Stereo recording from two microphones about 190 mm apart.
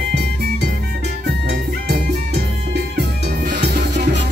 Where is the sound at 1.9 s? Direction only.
60° right (ahead or behind).